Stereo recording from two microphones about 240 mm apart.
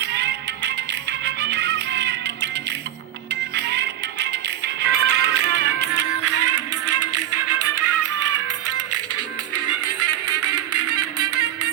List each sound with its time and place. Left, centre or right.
0.0 s music: right
3.5 s music: right
5.9 s music: right